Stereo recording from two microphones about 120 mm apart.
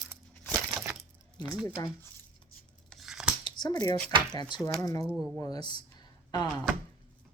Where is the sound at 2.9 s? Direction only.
Centre (ahead or behind).